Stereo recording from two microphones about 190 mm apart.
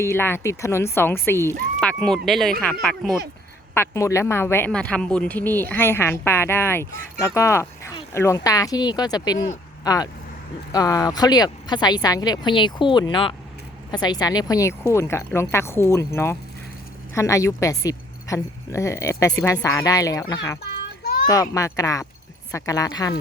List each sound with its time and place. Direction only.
0.0 s speech: 15° left (ahead or behind)
3.8 s speech: 15° left (ahead or behind)